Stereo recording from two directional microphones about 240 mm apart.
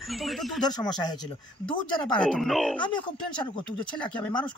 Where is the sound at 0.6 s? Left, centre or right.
Centre.